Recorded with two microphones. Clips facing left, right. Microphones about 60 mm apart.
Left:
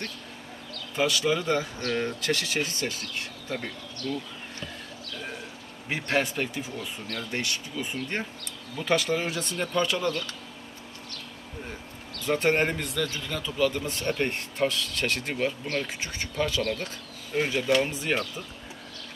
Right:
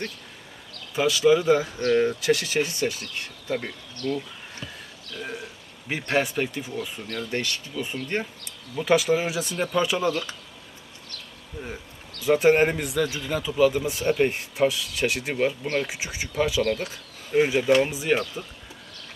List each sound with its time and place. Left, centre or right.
0.9 s a man's voice: centre
5.9 s speech: centre
7.8 s a man's voice: centre
12.2 s a man's voice: centre
15.6 s speech: right
15.9 s a man's voice: centre